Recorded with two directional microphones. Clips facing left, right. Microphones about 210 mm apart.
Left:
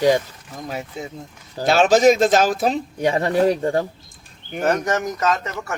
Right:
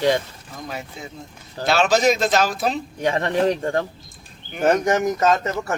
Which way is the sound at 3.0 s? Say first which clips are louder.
Left 2 dB; 10° left (ahead or behind).